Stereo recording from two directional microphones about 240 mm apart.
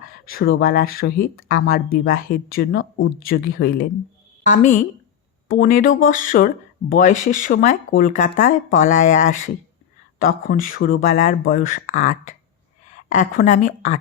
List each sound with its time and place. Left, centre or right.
0.3 s speech: left